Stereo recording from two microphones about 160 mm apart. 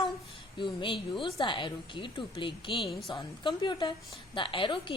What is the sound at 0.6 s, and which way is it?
A woman's voice, 30° left (ahead or behind).